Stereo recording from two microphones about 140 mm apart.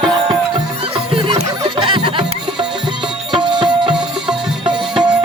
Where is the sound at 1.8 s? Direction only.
35° right (ahead or behind).